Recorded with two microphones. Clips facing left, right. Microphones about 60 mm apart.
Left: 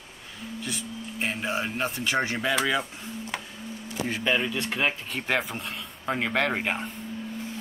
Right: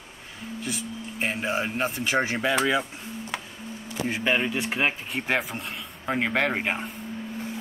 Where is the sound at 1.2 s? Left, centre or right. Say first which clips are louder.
Right 2 dB; centre.